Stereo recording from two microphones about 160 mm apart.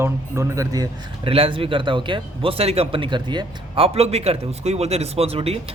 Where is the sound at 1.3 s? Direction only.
35° right (ahead or behind).